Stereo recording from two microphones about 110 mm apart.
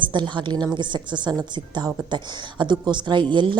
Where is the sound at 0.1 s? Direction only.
45° right (ahead or behind).